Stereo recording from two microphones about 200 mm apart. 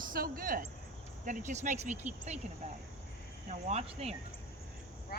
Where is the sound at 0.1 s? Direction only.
45° right (ahead or behind).